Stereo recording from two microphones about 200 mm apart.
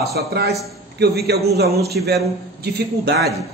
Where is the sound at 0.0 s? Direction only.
55° right (ahead or behind).